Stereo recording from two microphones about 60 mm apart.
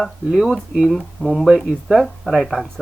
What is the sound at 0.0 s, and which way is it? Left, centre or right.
Speech, centre.